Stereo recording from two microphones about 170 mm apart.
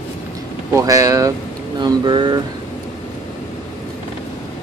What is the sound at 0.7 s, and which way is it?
Speech, 20° right (ahead or behind).